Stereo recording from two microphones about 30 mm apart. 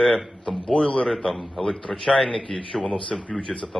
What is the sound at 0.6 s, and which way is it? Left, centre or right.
Speech, left.